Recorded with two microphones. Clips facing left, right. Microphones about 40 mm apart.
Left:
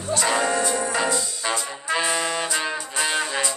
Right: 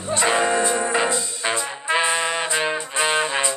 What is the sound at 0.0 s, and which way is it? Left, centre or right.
Music, right.